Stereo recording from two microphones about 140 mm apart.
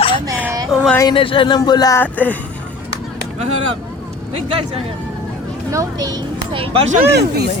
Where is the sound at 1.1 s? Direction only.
40° left (ahead or behind).